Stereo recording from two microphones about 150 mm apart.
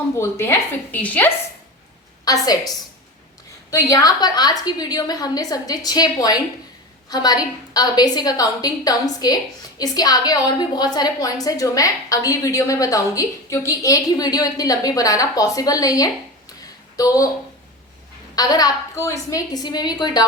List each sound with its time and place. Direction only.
0.2 s speech: 15° left (ahead or behind)
2.2 s a woman's voice: 25° left (ahead or behind)
18.3 s a woman's voice: 25° left (ahead or behind)